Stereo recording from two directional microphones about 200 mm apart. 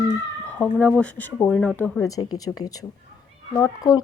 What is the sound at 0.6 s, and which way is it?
Speech, 10° left (ahead or behind).